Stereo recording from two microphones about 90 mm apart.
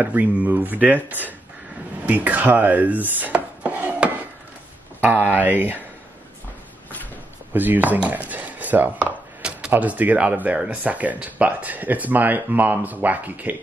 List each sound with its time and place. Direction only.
0.0 s speech: 20° right (ahead or behind)
2.0 s chopping: 15° right (ahead or behind)
5.0 s speech: 20° right (ahead or behind)
7.5 s speech: 20° right (ahead or behind)
8.3 s chopping: 20° right (ahead or behind)
9.7 s speech: 20° right (ahead or behind)